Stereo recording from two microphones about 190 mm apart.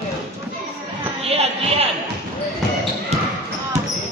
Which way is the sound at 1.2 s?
30° right (ahead or behind).